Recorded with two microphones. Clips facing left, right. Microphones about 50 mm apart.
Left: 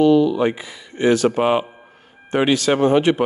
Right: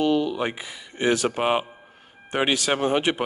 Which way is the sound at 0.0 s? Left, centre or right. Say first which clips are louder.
Left 8 dB; centre.